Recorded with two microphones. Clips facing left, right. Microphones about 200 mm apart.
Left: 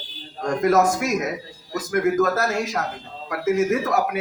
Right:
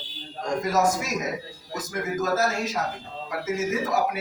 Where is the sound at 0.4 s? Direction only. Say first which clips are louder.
Left 5 dB; 60° left (ahead or behind).